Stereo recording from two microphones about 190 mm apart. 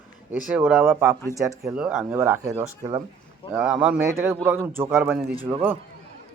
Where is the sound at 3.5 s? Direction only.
5° right (ahead or behind).